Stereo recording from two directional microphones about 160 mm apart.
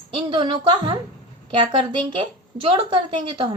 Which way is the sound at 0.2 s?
30° right (ahead or behind).